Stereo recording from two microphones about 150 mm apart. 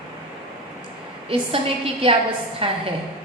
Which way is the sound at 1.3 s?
40° right (ahead or behind).